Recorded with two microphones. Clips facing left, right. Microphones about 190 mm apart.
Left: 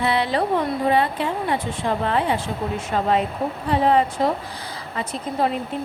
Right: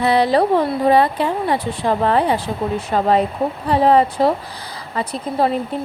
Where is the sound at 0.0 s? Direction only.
40° right (ahead or behind).